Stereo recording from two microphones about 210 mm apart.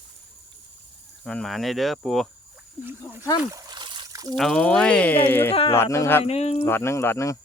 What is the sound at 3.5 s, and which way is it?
Trickle, 20° right (ahead or behind).